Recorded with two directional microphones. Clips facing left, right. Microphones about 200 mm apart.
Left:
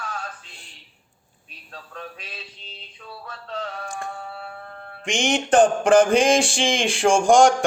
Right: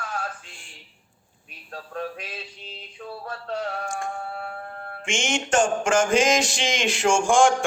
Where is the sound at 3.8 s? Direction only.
35° left (ahead or behind).